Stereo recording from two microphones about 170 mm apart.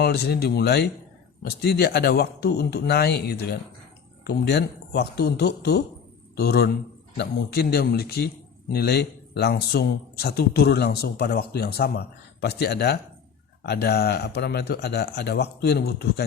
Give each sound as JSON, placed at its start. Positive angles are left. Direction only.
{"t": 0.0, "sound": "a man's voice", "side_deg": 70}